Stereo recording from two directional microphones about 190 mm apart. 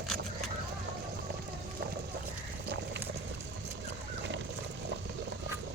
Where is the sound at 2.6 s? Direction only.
65° right (ahead or behind).